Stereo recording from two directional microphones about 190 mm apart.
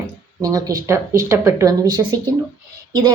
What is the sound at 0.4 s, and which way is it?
A woman's voice, 20° right (ahead or behind).